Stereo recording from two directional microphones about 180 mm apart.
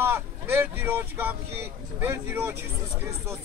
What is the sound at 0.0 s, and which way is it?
Speech, 10° right (ahead or behind).